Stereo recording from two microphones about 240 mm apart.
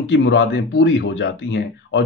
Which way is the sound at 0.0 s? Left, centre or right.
Left.